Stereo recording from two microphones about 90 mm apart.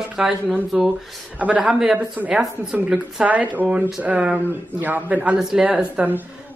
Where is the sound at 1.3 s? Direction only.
15° right (ahead or behind).